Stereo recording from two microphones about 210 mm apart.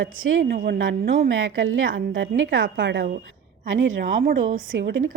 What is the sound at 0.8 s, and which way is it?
Speech, 50° right (ahead or behind).